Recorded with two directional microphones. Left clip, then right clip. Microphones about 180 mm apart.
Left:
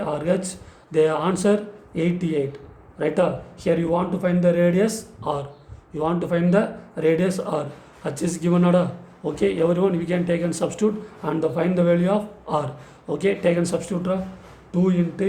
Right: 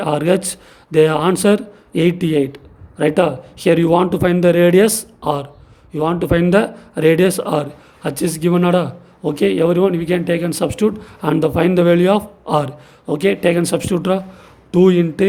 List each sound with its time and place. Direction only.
0.0 s a man's voice: 55° right (ahead or behind)